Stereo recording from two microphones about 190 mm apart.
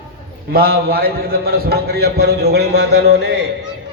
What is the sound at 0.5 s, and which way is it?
A man's voice, 55° right (ahead or behind).